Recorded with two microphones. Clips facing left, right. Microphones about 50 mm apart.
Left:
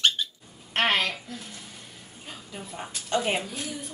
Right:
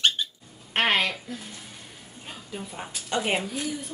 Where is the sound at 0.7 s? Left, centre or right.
Centre.